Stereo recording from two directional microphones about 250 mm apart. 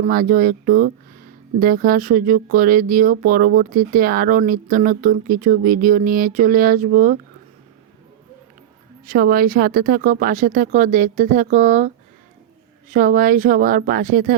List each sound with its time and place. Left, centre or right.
0.0 s speech: right
9.0 s speech: right
12.9 s speech: right